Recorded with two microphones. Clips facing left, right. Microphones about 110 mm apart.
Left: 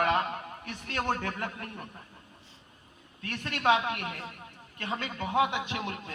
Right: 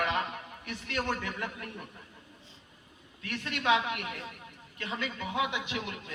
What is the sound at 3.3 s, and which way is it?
A man's voice, 50° left (ahead or behind).